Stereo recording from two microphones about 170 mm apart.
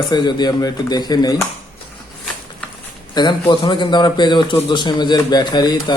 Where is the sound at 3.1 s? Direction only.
25° left (ahead or behind).